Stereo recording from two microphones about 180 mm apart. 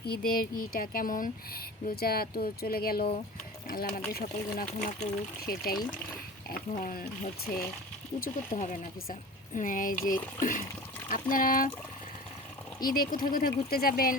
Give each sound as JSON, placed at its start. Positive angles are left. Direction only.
{"t": 0.0, "sound": "speech", "side_deg": 55}
{"t": 8.2, "sound": "speech", "side_deg": 45}
{"t": 12.8, "sound": "speech", "side_deg": 55}